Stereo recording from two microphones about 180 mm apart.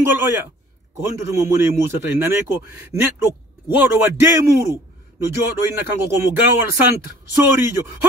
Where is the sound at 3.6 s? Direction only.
10° right (ahead or behind).